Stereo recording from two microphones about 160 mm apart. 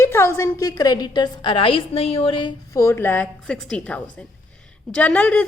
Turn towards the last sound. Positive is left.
turn(degrees=10)  # may be behind; listen again after turning